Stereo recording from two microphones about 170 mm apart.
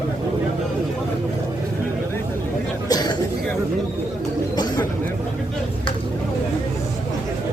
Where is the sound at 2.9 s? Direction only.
25° left (ahead or behind).